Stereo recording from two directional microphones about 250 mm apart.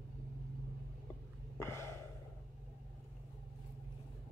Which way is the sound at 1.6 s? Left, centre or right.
Centre.